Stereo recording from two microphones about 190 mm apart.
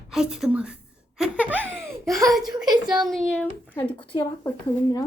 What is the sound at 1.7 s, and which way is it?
Laughter, 15° right (ahead or behind).